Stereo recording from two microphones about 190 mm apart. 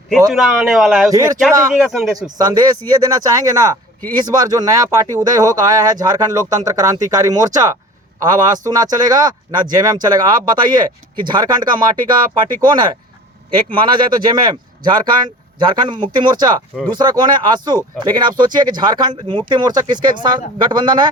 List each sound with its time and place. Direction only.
0.3 s a man's voice: centre (ahead or behind)
1.1 s speech: 15° right (ahead or behind)
1.9 s a man's voice: centre (ahead or behind)
2.1 s speech: 20° right (ahead or behind)